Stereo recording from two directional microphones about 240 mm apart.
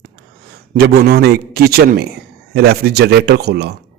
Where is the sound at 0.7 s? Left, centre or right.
Right.